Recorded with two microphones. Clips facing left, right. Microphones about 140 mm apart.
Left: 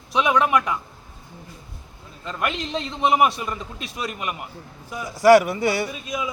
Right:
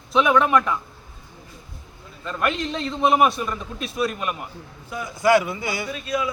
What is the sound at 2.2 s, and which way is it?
A man's voice, 20° left (ahead or behind).